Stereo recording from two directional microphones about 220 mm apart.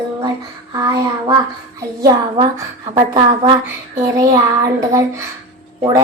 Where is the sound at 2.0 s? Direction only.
20° right (ahead or behind).